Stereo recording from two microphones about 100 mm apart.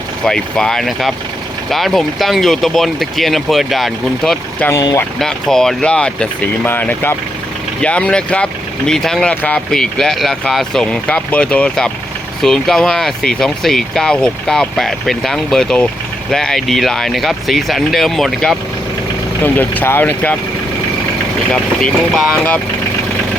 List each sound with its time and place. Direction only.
0.3 s speech: 5° left (ahead or behind)
4.7 s speech: 40° left (ahead or behind)
5.2 s speech: 5° left (ahead or behind)
9.3 s speech: 20° left (ahead or behind)
9.7 s speech: 5° left (ahead or behind)
19.4 s speech: 20° left (ahead or behind)
21.5 s speech: 10° left (ahead or behind)